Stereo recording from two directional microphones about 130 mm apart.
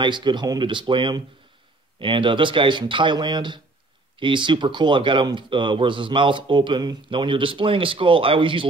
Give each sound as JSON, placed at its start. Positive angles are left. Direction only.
{"t": 0.0, "sound": "speech", "side_deg": -35}